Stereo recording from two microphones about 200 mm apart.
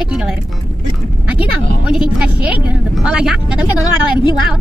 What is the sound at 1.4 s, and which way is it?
A woman's voice, 5° right (ahead or behind).